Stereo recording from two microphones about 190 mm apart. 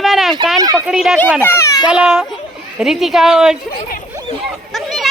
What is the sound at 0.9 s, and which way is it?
Speech, centre (ahead or behind).